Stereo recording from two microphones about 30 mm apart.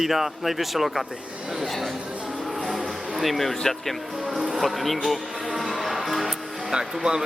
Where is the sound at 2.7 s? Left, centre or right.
Centre.